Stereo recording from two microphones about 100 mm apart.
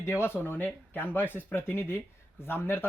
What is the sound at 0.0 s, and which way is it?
Speech, 25° left (ahead or behind).